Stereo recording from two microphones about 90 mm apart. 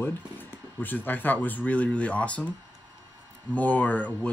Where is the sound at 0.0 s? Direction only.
25° left (ahead or behind).